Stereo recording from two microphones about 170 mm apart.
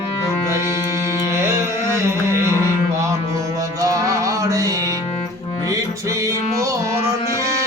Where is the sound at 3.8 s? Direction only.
20° right (ahead or behind).